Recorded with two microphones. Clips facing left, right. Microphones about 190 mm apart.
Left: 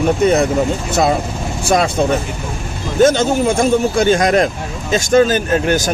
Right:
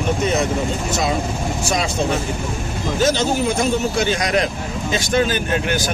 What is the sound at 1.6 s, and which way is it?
Speech, 55° left (ahead or behind).